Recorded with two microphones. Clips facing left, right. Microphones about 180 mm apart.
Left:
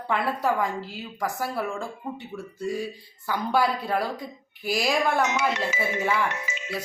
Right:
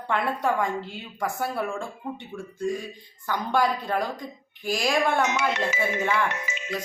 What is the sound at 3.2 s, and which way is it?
A woman's voice, 5° left (ahead or behind).